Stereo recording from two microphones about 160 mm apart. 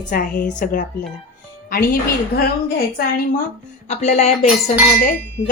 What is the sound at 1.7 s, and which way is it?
Speech, 65° left (ahead or behind).